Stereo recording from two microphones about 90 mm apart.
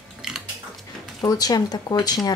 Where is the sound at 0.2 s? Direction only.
5° right (ahead or behind).